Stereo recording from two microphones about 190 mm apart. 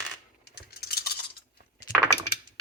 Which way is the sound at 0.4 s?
55° left (ahead or behind).